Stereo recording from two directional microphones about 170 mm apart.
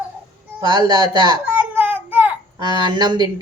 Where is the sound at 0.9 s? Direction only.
25° right (ahead or behind).